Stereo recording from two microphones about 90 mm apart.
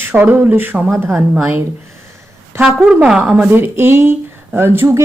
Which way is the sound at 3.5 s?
25° right (ahead or behind).